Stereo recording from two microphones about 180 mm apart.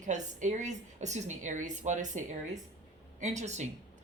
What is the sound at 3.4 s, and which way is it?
Speech, 40° right (ahead or behind).